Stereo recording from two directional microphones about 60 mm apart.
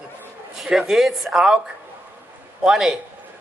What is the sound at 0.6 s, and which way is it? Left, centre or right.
A woman's voice, centre.